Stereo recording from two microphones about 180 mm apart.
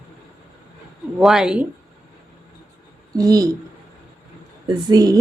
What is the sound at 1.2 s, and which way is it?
Speech, 5° right (ahead or behind).